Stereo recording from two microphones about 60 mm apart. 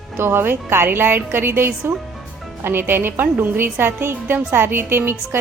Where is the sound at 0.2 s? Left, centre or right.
Right.